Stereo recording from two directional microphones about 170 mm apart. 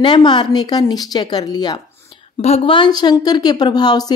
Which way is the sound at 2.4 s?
35° left (ahead or behind).